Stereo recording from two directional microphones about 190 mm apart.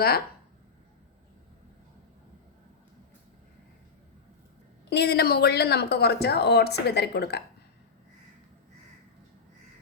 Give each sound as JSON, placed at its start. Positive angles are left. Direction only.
{"t": 4.9, "sound": "speech", "side_deg": 60}